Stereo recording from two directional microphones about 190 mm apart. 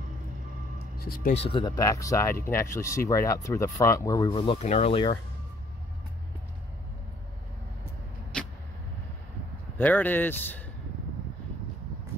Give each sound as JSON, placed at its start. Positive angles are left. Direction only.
{"t": 0.9, "sound": "speech", "side_deg": 50}
{"t": 1.3, "sound": "speech", "side_deg": 30}
{"t": 1.6, "sound": "speech", "side_deg": 15}
{"t": 4.4, "sound": "speech", "side_deg": 35}
{"t": 8.3, "sound": "vehicle", "side_deg": 5}
{"t": 9.8, "sound": "speech", "side_deg": 10}